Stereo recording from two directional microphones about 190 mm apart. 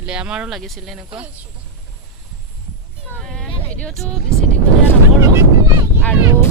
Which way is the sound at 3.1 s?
5° left (ahead or behind).